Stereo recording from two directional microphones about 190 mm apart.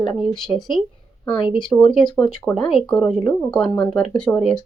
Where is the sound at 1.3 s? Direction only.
25° left (ahead or behind).